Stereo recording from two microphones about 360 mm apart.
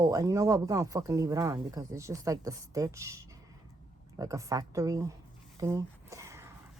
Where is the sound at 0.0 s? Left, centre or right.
Centre.